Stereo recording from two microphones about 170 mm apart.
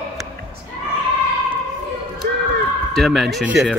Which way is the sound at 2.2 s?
65° right (ahead or behind).